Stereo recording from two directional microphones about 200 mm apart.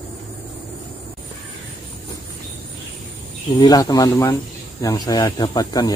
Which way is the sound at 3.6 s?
20° left (ahead or behind).